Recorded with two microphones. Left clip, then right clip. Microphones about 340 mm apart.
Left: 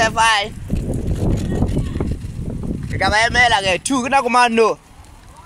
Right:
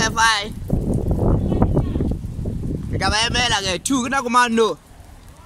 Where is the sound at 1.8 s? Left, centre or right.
Right.